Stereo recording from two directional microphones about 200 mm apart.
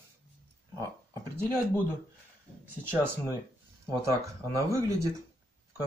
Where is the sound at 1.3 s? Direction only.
10° right (ahead or behind).